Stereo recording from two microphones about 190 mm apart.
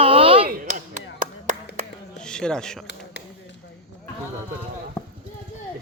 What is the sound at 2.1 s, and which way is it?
Speech, 5° left (ahead or behind).